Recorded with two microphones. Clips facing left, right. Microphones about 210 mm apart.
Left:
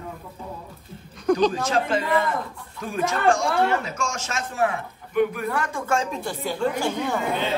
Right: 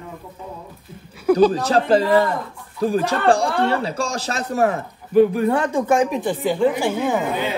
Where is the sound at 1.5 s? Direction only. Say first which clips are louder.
Right 6 dB; 35° right (ahead or behind); by 7.5 s 15° right (ahead or behind).